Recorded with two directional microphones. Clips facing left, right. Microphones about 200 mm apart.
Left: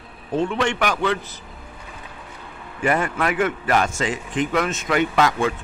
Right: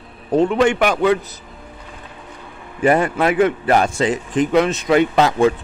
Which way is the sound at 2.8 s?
35° right (ahead or behind).